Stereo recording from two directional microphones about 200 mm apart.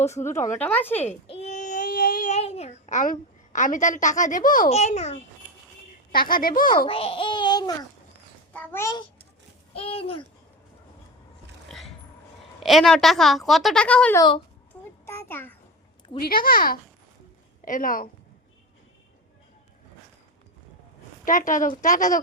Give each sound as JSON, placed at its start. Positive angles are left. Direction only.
{"t": 0.0, "sound": "speech", "side_deg": 15}
{"t": 1.0, "sound": "child singing", "side_deg": 35}
{"t": 6.1, "sound": "speech", "side_deg": 45}
{"t": 6.7, "sound": "a child's voice", "side_deg": 25}
{"t": 8.5, "sound": "a child's voice", "side_deg": 10}
{"t": 9.7, "sound": "a child's voice", "side_deg": 30}
{"t": 12.6, "sound": "speech", "side_deg": 0}
{"t": 14.2, "sound": "a child's voice", "side_deg": 25}
{"t": 15.0, "sound": "a sound", "side_deg": 10}
{"t": 16.2, "sound": "speech", "side_deg": 45}
{"t": 21.2, "sound": "a woman's voice", "side_deg": 40}